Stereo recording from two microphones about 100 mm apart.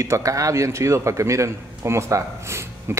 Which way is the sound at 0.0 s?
30° right (ahead or behind).